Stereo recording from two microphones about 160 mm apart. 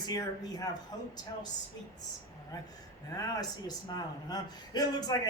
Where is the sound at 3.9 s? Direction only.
25° left (ahead or behind).